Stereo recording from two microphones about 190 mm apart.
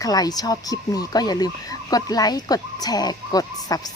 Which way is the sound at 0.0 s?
20° left (ahead or behind).